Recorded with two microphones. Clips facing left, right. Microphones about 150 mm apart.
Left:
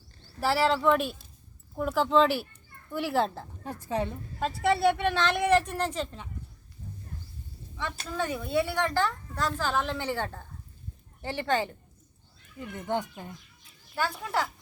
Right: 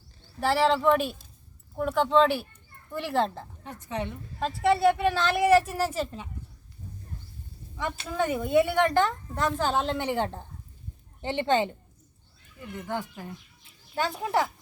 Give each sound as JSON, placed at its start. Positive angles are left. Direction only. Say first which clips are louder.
{"t": 0.3, "sound": "a woman's voice", "louder": "right 2 dB", "side_deg": 0}
{"t": 3.8, "sound": "a woman's voice", "louder": "left 2 dB", "side_deg": 35}
{"t": 4.4, "sound": "a woman's voice", "louder": "right 2 dB", "side_deg": 0}
{"t": 8.1, "sound": "a woman's voice", "louder": "right 5 dB", "side_deg": -20}
{"t": 12.5, "sound": "speech", "louder": "left 2 dB", "side_deg": 20}
{"t": 13.9, "sound": "a woman's voice", "louder": "right 3 dB", "side_deg": -20}